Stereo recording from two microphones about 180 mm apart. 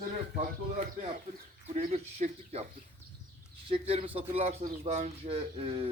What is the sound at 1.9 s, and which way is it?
Speech, 35° right (ahead or behind).